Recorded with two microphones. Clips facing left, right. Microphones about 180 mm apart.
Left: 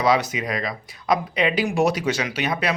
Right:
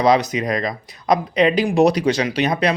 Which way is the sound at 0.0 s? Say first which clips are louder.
Right 4 dB; 40° right (ahead or behind).